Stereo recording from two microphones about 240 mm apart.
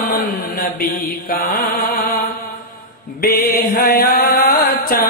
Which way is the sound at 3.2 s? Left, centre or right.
Left.